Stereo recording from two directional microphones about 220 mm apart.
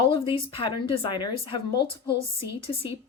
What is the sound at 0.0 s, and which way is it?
A woman's voice, 25° left (ahead or behind).